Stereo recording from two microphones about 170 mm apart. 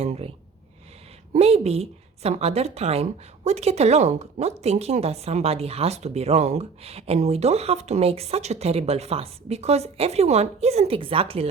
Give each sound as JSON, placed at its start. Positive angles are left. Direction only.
{"t": 0.0, "sound": "a woman's voice", "side_deg": -35}
{"t": 1.3, "sound": "a woman's voice", "side_deg": -40}